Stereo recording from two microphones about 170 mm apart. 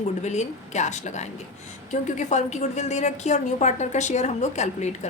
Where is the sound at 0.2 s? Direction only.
40° left (ahead or behind).